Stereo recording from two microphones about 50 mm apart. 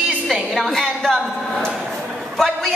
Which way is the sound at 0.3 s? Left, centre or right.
Centre.